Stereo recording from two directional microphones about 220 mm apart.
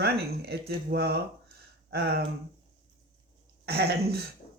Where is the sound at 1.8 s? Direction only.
45° right (ahead or behind).